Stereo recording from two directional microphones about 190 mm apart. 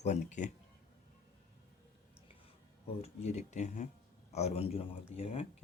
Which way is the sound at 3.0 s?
35° left (ahead or behind).